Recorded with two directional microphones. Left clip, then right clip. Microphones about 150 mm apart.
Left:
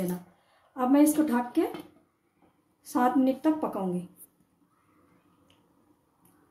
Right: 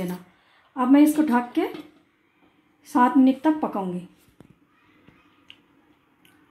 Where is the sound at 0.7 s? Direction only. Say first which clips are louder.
Right 5 dB; 45° right (ahead or behind).